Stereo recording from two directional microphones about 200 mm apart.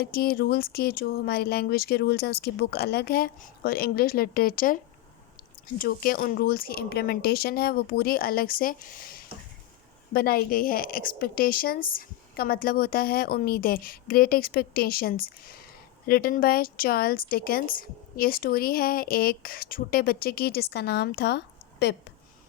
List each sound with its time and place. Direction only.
0.0 s a woman's voice: 50° left (ahead or behind)
5.8 s a woman's voice: 45° left (ahead or behind)